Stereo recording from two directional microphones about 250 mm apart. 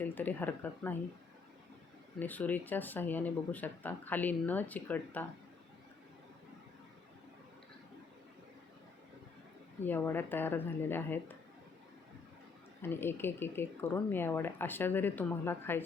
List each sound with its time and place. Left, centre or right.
0.0 s speech: centre
2.1 s speech: centre
9.8 s speech: centre
12.8 s speech: centre